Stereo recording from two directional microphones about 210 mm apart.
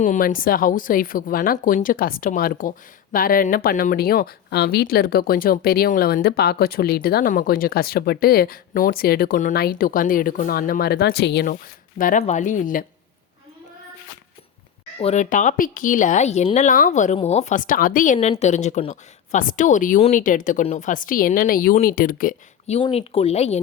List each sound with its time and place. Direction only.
0.0 s speech: 35° left (ahead or behind)
11.9 s speech: 40° left (ahead or behind)
14.9 s speech: 30° left (ahead or behind)